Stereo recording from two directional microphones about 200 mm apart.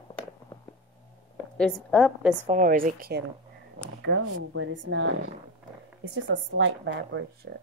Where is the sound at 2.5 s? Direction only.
40° right (ahead or behind).